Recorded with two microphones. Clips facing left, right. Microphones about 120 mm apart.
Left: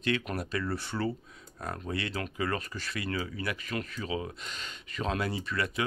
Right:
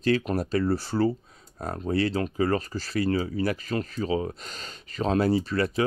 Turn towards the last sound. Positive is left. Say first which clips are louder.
# right 9 dB
turn(degrees=-35)  # may be behind; listen again after turning